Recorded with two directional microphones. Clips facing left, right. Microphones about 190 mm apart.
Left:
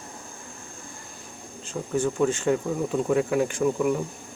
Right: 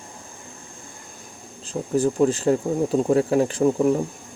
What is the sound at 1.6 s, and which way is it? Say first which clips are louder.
Speech: right 4 dB; 35° right (ahead or behind).